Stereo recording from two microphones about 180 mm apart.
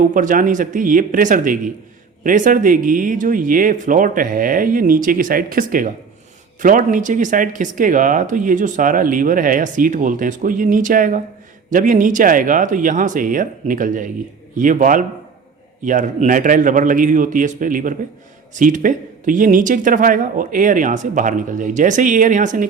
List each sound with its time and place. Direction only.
0.1 s speech: 45° right (ahead or behind)